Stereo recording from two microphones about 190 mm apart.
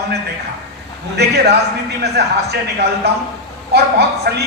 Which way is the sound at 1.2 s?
60° right (ahead or behind).